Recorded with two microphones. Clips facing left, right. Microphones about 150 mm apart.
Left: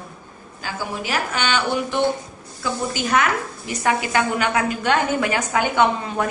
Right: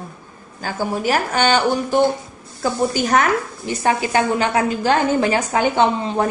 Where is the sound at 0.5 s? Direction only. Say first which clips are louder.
Right 5 dB; 45° right (ahead or behind).